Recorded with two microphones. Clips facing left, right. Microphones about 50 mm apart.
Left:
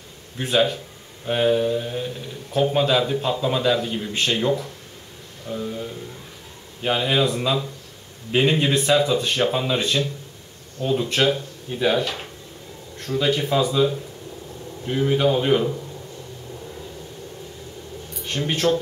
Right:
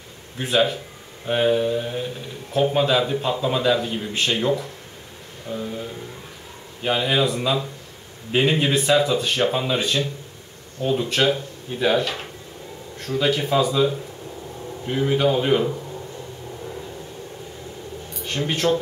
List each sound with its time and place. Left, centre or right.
0.4 s a man's voice: centre
14.9 s a man's voice: centre
18.3 s a man's voice: centre